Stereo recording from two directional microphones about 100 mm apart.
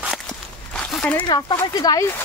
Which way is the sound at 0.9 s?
10° left (ahead or behind).